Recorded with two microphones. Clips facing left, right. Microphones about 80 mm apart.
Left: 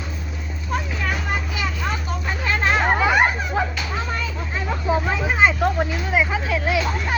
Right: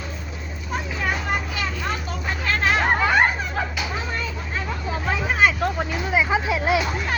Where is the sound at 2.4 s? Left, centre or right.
Centre.